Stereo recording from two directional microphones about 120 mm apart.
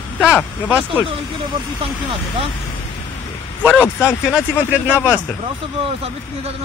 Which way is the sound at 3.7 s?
10° right (ahead or behind).